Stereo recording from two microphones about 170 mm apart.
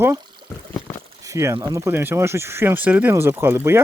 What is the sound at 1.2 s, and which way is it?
Speech, 20° right (ahead or behind).